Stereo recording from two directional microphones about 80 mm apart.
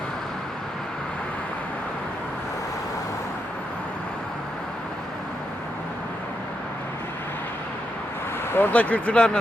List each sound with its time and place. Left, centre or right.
8.5 s speech: left